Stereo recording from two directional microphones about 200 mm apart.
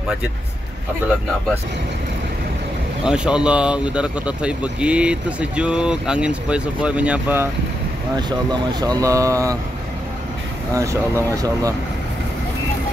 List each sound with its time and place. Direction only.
3.1 s speech: 5° right (ahead or behind)
8.2 s speech: 20° right (ahead or behind)
10.7 s speech: 15° right (ahead or behind)